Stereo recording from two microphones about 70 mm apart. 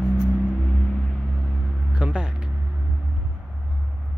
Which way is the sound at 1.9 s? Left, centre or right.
Centre.